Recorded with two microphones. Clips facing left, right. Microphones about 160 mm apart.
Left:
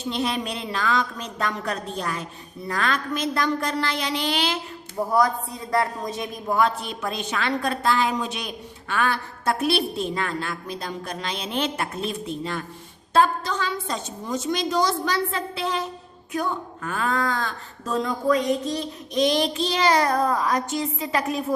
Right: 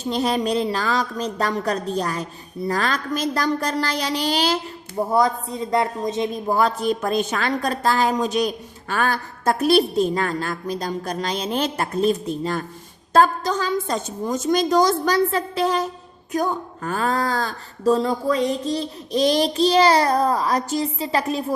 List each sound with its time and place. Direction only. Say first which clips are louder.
0.0 s speech: right 5 dB; 40° right (ahead or behind)
4.9 s a woman's voice: right 2 dB; 25° right (ahead or behind)